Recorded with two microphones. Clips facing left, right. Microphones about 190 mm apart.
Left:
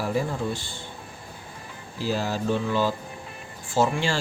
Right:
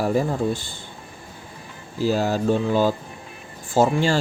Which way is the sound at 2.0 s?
45° right (ahead or behind).